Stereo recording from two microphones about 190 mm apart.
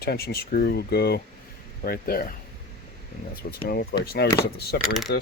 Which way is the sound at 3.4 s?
50° left (ahead or behind).